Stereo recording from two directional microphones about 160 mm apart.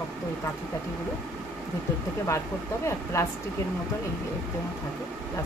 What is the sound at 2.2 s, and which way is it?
Speech, 20° left (ahead or behind).